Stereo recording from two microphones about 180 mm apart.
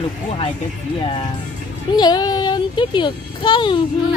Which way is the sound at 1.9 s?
25° left (ahead or behind).